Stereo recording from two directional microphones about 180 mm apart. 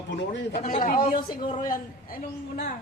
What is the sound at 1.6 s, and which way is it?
Speech, 50° left (ahead or behind).